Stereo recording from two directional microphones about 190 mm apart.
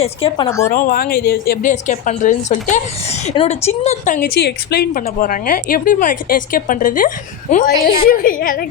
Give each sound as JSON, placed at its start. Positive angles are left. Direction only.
{"t": 0.0, "sound": "a woman's voice", "side_deg": 30}
{"t": 0.7, "sound": "a woman's voice", "side_deg": 50}
{"t": 4.4, "sound": "a woman's voice", "side_deg": 60}
{"t": 5.0, "sound": "a woman's voice", "side_deg": 45}